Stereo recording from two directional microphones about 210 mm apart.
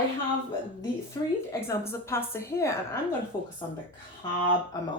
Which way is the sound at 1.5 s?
10° left (ahead or behind).